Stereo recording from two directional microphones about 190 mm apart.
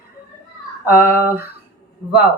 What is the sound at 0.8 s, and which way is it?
Speech, 10° right (ahead or behind).